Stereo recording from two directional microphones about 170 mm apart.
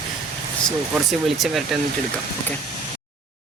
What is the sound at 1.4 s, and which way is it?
Speech, centre (ahead or behind).